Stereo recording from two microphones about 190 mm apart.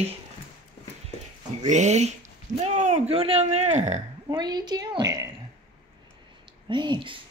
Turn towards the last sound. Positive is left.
turn(degrees=-25)  # may be behind; listen again after turning